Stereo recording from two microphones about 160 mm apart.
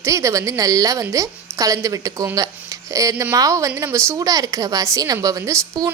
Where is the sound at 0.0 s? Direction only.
20° right (ahead or behind).